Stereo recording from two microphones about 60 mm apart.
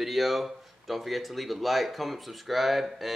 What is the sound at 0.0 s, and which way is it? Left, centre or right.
Speech, centre.